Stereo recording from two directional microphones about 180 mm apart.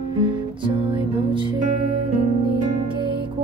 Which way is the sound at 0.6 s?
30° right (ahead or behind).